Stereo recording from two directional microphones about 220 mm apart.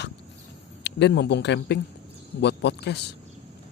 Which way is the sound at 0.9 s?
50° left (ahead or behind).